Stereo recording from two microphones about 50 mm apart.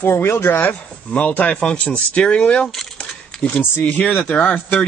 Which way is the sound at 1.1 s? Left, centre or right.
Left.